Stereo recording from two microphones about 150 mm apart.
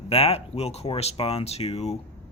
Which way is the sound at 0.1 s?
45° left (ahead or behind).